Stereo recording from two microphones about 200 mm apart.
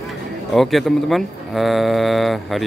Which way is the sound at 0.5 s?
Centre (ahead or behind).